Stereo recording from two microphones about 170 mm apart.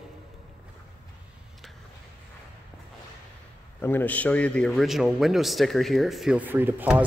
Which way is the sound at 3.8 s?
10° left (ahead or behind).